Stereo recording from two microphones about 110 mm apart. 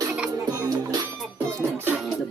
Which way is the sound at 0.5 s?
35° right (ahead or behind).